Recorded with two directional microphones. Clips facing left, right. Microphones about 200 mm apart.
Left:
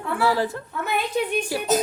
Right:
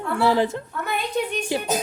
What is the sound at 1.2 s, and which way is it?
Speech, 5° left (ahead or behind).